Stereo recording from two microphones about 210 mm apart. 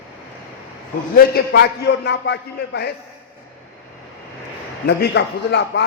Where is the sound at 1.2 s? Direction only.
50° left (ahead or behind).